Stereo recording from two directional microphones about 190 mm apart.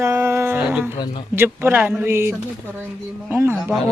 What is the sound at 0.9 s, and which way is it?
Speech, 25° left (ahead or behind).